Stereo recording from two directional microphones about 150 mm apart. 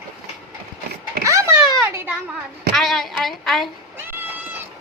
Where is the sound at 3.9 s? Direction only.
15° right (ahead or behind).